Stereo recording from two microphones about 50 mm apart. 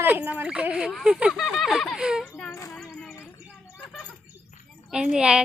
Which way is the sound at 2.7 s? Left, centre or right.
Centre.